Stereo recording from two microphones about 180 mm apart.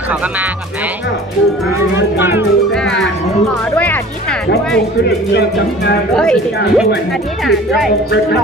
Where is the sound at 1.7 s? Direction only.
15° right (ahead or behind).